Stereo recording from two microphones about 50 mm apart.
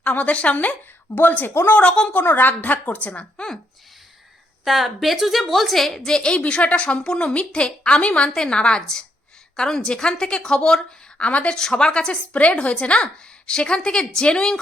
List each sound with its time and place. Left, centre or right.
0.0 s a woman's voice: left
1.8 s a woman's voice: centre
2.3 s a woman's voice: left
4.6 s a woman's voice: centre; by 11.5 s left
11.5 s a woman's voice: centre